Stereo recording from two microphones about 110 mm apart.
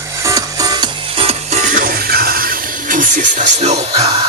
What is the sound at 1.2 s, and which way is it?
Music, 80° right.